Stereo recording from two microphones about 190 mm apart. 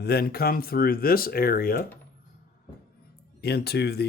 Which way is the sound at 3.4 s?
55° left (ahead or behind).